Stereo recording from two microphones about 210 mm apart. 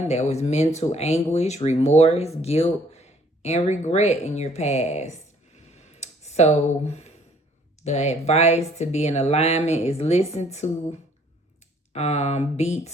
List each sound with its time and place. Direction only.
0.1 s speech: 30° left (ahead or behind)
5.5 s a sound: 30° left (ahead or behind)
7.8 s speech: 30° left (ahead or behind)